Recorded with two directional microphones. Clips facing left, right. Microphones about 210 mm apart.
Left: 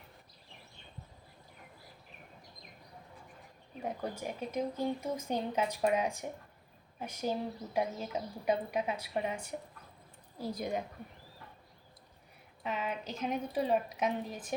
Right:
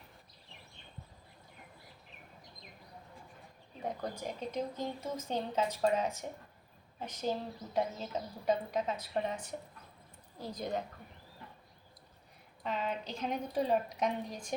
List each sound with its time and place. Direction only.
3.8 s a woman's voice: 10° left (ahead or behind)
12.6 s a woman's voice: 5° left (ahead or behind)